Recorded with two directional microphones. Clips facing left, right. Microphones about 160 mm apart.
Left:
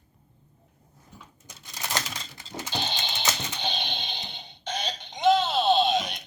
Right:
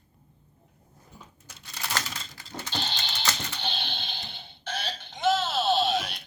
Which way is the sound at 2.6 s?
15° left (ahead or behind).